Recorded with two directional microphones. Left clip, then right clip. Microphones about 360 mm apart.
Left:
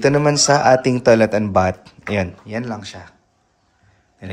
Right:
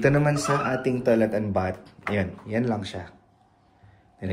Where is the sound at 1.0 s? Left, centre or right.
Left.